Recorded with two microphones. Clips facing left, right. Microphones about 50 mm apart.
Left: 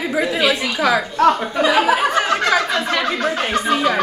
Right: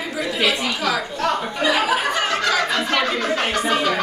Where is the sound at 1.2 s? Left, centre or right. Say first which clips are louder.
Left 9 dB; left.